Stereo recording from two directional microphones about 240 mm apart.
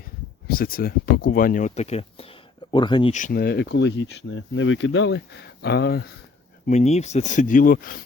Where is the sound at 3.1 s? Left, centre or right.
Left.